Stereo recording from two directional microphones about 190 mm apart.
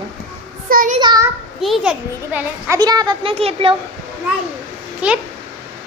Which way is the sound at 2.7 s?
20° right (ahead or behind).